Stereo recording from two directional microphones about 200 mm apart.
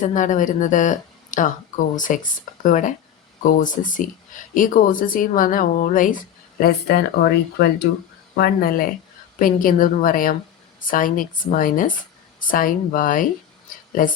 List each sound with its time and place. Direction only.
0.0 s a woman's voice: 40° left (ahead or behind)